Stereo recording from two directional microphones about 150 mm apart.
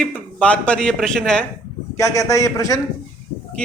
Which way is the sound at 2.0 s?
20° left (ahead or behind).